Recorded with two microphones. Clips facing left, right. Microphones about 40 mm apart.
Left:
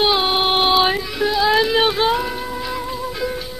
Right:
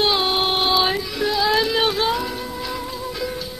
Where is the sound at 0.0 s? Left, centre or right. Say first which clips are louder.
Left 2 dB; centre.